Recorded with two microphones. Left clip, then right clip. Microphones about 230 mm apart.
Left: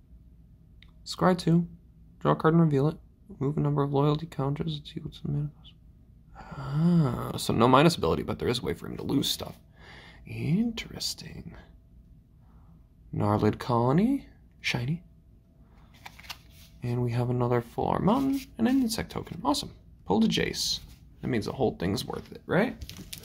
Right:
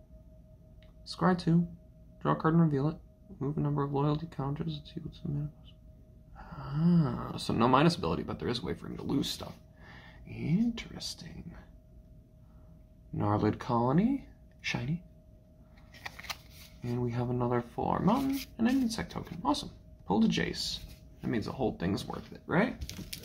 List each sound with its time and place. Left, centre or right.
1.0 s speech: left
13.1 s speech: left
15.9 s a sound: centre
16.8 s speech: left
22.8 s speech: centre